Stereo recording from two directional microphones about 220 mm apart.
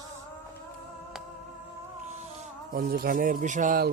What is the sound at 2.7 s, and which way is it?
Speech, 40° right (ahead or behind).